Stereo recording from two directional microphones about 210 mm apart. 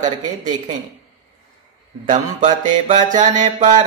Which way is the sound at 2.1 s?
35° right (ahead or behind).